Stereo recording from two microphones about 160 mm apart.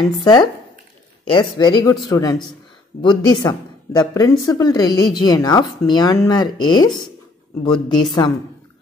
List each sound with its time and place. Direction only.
0.2 s speech: 25° left (ahead or behind)